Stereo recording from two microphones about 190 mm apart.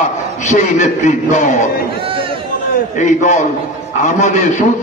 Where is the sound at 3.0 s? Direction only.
40° left (ahead or behind).